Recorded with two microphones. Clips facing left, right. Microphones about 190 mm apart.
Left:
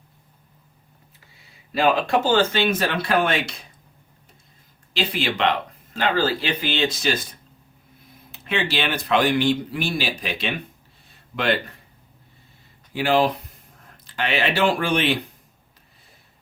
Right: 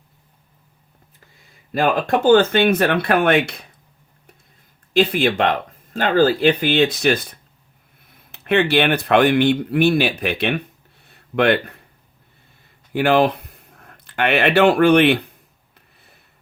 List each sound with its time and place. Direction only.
1.7 s speech: 50° right (ahead or behind)
4.9 s speech: 50° right (ahead or behind)
8.3 s speech: 60° right (ahead or behind)
12.9 s speech: 55° right (ahead or behind)